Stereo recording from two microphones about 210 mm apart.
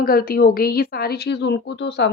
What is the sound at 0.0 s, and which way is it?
A woman's voice, 45° left (ahead or behind).